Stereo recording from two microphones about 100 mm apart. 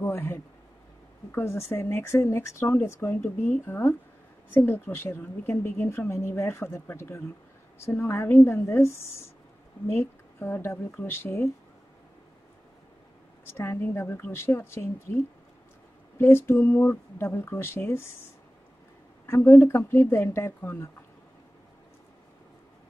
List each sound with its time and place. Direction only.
0.0 s a sound: 25° left (ahead or behind)
1.3 s a woman's voice: 25° left (ahead or behind)
13.5 s a woman's voice: 25° left (ahead or behind)
19.2 s a woman's voice: 25° left (ahead or behind)